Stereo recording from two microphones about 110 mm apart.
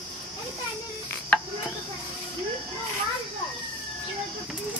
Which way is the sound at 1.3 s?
10° left (ahead or behind).